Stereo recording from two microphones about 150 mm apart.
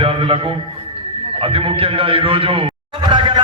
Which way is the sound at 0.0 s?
35° right (ahead or behind).